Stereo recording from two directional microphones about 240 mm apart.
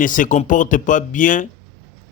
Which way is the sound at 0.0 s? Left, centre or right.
Left.